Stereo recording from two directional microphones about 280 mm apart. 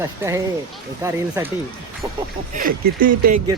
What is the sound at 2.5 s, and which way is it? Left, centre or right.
Speech, right.